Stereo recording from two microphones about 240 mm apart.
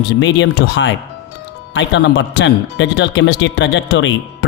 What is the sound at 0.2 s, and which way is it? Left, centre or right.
Speech, left.